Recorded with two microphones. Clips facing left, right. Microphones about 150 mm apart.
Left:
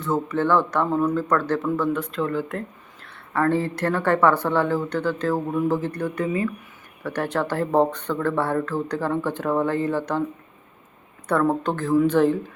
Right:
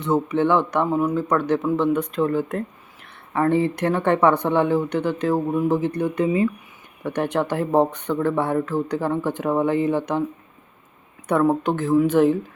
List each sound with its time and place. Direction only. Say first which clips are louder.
0.0 s a woman's voice: right 3 dB; 20° right (ahead or behind)
11.3 s speech: right 2 dB; 15° right (ahead or behind)